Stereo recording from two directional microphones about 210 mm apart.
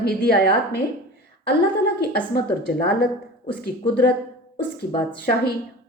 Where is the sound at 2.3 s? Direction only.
50° left (ahead or behind).